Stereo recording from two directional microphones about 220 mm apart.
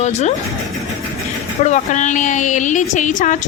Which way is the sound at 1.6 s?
35° left (ahead or behind).